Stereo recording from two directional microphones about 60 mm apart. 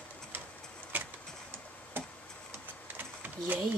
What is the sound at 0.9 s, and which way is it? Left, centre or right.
Vehicle, right.